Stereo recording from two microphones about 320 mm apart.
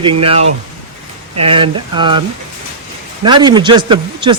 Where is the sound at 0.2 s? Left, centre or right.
Centre.